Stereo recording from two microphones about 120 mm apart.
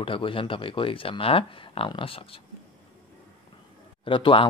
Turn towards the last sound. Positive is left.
turn(degrees=45)  # may be behind; listen again after turning